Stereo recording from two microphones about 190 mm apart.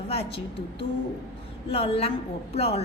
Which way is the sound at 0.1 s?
30° left (ahead or behind).